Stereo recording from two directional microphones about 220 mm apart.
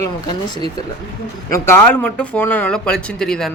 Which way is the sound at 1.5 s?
10° left (ahead or behind).